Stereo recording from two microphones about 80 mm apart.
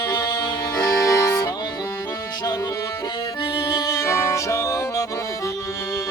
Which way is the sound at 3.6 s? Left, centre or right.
Left.